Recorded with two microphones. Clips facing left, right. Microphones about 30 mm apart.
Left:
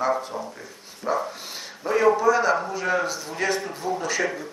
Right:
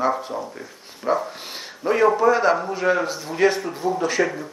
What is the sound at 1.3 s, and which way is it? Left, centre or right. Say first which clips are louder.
Dog: right 2 dB; right.